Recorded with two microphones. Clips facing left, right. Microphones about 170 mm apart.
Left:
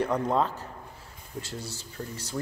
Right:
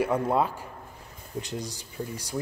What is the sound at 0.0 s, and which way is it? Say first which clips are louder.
Speech: right 1 dB; 10° right (ahead or behind).